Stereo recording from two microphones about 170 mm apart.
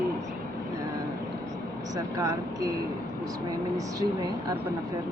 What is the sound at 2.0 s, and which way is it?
Speech, 20° right (ahead or behind).